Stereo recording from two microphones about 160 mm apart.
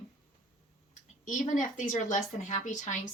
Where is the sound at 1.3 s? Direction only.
50° left (ahead or behind).